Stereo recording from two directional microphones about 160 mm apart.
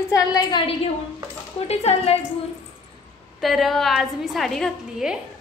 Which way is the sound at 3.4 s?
Centre (ahead or behind).